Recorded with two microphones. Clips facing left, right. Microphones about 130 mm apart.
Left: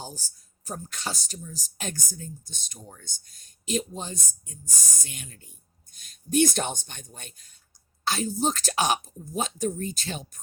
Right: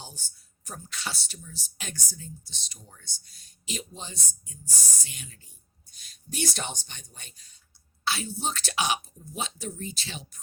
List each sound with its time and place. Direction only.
0.0 s speech: 40° left (ahead or behind)